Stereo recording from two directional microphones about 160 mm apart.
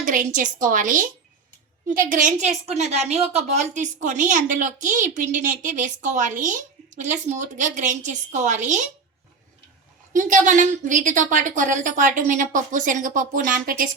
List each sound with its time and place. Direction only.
0.0 s a woman's voice: 50° right (ahead or behind)
10.1 s a woman's voice: 55° right (ahead or behind)